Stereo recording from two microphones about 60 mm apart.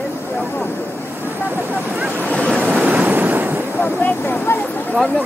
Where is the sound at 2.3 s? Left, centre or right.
Centre.